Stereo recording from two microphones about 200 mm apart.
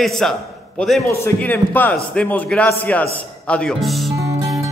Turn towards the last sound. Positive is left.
turn(degrees=-15)  # may be behind; listen again after turning